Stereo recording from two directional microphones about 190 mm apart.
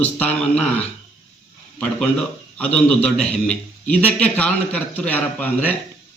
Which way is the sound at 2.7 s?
5° left (ahead or behind).